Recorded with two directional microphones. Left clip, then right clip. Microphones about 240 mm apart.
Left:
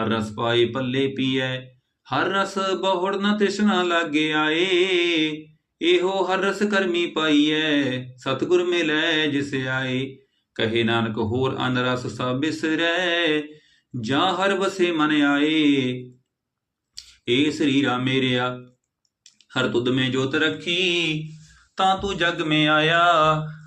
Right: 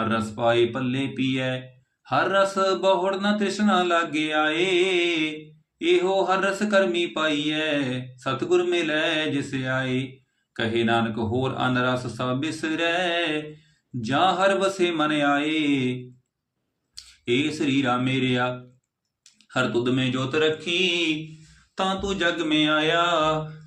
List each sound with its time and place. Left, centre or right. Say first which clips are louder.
0.0 s speech: right 1 dB; centre
21.8 s mantra: left 4 dB; centre